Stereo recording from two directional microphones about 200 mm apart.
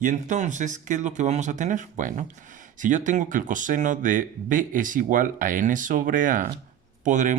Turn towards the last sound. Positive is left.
turn(degrees=-40)  # may be behind; listen again after turning